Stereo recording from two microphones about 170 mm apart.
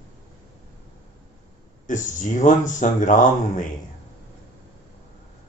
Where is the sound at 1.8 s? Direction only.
50° left (ahead or behind).